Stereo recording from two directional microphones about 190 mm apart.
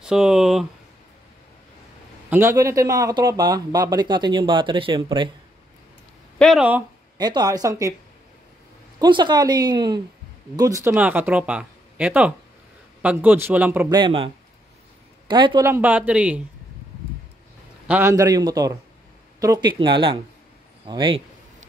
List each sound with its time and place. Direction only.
0.0 s speech: 5° right (ahead or behind)
2.2 s speech: 15° right (ahead or behind)
6.3 s speech: centre (ahead or behind)
7.2 s speech: 20° right (ahead or behind)
9.0 s speech: 25° right (ahead or behind)
13.9 s speech: 25° right (ahead or behind); by 16.4 s 5° right (ahead or behind)
17.8 s speech: 10° right (ahead or behind)